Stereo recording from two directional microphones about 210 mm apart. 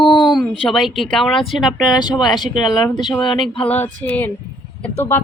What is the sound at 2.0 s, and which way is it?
Speech, 20° left (ahead or behind).